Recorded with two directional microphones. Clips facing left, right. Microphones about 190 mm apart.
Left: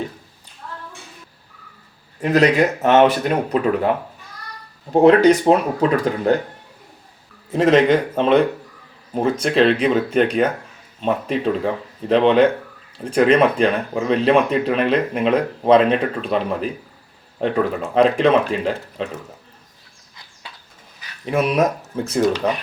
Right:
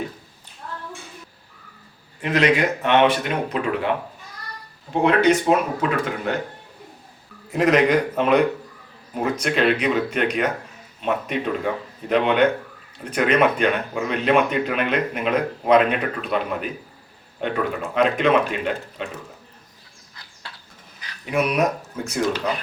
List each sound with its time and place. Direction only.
2.2 s speech: 40° left (ahead or behind)
4.9 s speech: 35° left (ahead or behind)
7.5 s speech: 30° left (ahead or behind)